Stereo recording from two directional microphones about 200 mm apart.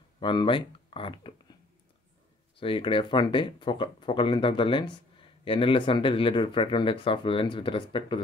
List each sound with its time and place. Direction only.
0.2 s speech: 25° left (ahead or behind)
2.6 s speech: 25° left (ahead or behind)